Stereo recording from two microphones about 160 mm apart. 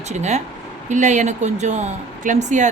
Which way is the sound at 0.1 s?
45° right (ahead or behind).